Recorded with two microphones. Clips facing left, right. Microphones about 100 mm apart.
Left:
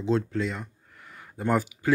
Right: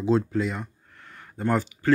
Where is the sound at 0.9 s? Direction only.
5° left (ahead or behind).